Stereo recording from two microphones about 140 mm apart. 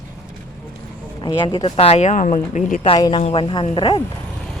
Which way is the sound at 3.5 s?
35° left (ahead or behind).